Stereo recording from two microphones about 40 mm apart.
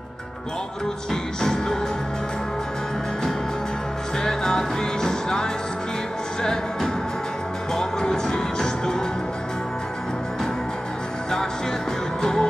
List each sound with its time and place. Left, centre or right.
1.4 s music: centre
4.2 s music: centre
12.2 s music: centre